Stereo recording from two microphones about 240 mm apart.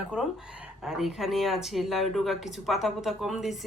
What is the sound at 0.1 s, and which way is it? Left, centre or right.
Speech, centre.